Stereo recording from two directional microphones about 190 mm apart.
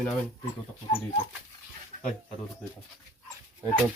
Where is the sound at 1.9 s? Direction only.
45° right (ahead or behind).